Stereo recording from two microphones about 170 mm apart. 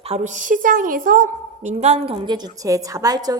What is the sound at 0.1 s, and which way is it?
A woman's voice, 45° right (ahead or behind).